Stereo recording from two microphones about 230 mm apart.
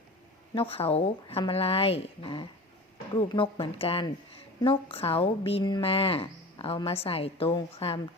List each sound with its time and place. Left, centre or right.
0.5 s speech: left